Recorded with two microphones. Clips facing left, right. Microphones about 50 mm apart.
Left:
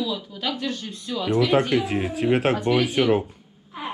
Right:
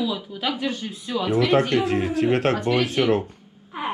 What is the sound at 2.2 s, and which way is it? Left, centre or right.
Speech, centre.